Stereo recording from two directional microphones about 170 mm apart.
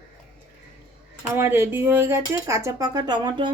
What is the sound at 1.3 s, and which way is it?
Speech, 15° right (ahead or behind).